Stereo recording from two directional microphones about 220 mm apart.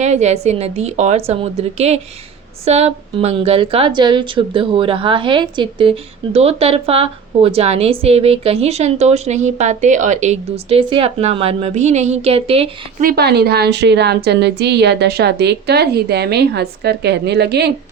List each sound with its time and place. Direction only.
0.0 s a woman's voice: 30° right (ahead or behind)
13.0 s a woman's voice: 45° right (ahead or behind)